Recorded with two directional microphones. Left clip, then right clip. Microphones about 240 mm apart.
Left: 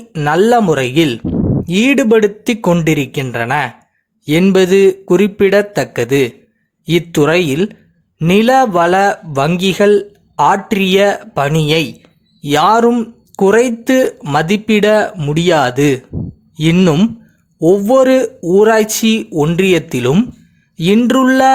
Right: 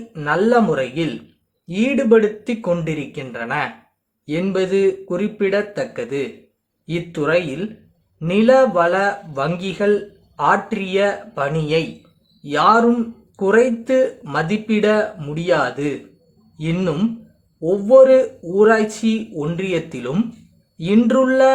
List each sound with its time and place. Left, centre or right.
0.1 s a man's voice: left